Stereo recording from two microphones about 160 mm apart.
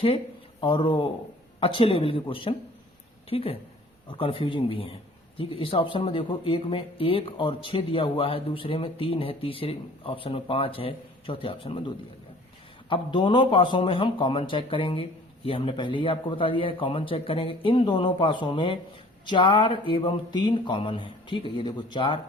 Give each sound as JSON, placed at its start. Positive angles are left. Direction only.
{"t": 0.6, "sound": "speech", "side_deg": 30}
{"t": 12.9, "sound": "speech", "side_deg": 30}